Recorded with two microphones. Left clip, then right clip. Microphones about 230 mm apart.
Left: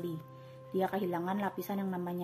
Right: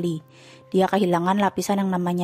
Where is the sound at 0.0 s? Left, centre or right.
Right.